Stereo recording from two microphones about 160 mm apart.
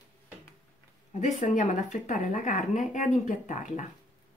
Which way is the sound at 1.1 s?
50° left (ahead or behind).